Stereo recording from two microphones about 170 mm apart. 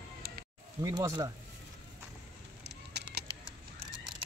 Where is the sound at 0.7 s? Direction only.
20° right (ahead or behind).